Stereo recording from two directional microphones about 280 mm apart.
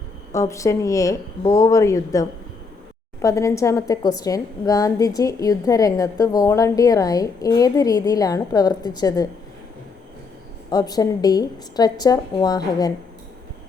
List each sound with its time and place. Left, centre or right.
0.3 s a woman's voice: centre
10.7 s a woman's voice: centre